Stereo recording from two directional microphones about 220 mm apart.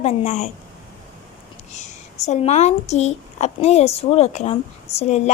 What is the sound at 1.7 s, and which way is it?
A woman's voice, 30° left (ahead or behind).